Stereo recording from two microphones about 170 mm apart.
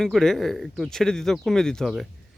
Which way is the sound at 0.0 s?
5° left (ahead or behind).